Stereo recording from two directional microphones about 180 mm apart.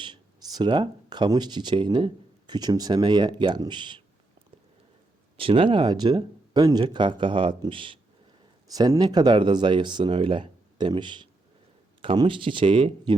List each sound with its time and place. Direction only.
0.0 s speech: 25° right (ahead or behind)
5.4 s speech: 30° right (ahead or behind)